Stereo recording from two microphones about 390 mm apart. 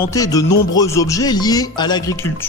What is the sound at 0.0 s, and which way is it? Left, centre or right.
Speech, centre.